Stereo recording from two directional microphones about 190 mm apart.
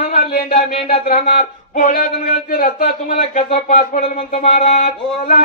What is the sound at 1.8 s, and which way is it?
Speech, 45° left (ahead or behind).